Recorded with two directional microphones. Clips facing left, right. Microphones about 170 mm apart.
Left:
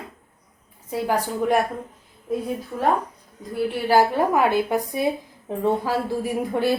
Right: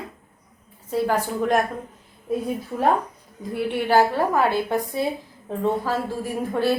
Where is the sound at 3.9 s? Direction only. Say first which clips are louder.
Left 1 dB; 15° left (ahead or behind).